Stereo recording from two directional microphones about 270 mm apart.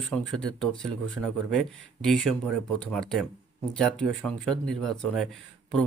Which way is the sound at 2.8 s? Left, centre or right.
Centre.